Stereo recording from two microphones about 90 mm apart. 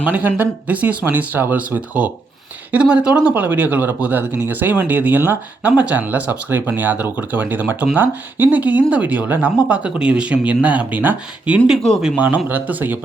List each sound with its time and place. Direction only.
0.0 s speech: 20° right (ahead or behind)
11.8 s speech: 5° left (ahead or behind)
12.1 s speech: 20° right (ahead or behind)